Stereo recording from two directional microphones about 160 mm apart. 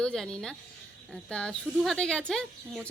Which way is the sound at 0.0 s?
5° left (ahead or behind).